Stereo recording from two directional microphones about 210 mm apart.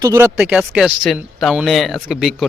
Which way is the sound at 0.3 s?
Centre (ahead or behind).